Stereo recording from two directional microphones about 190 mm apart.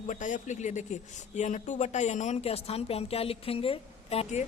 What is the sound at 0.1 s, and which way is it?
A woman's voice, 40° left (ahead or behind).